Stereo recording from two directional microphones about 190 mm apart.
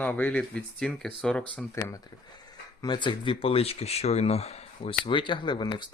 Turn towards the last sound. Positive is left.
turn(degrees=25)  # may be behind; listen again after turning